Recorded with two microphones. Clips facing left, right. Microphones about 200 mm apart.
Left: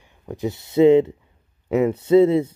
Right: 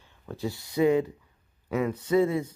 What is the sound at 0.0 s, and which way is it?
Speech, 15° left (ahead or behind).